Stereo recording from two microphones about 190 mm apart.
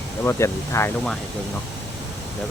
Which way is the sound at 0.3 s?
15° left (ahead or behind).